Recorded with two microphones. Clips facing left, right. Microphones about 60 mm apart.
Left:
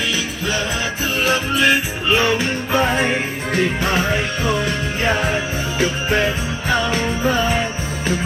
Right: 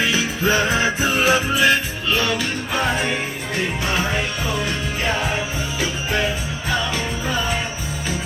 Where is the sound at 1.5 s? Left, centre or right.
Centre.